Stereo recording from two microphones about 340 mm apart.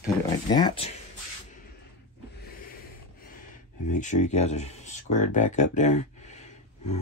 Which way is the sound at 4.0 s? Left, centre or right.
Left.